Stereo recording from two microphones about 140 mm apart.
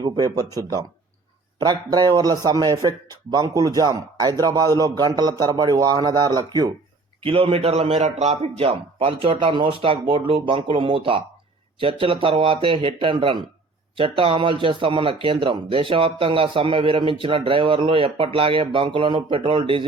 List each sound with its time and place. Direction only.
0.3 s speech: 25° right (ahead or behind)
7.2 s speech: 40° right (ahead or behind)